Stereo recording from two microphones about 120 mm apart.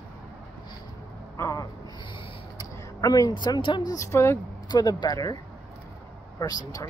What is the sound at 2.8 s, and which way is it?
A woman's voice, 30° left (ahead or behind).